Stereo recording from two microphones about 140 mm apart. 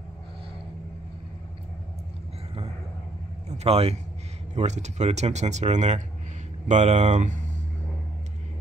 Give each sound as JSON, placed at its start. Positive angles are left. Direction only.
{"t": 3.4, "sound": "speech", "side_deg": -50}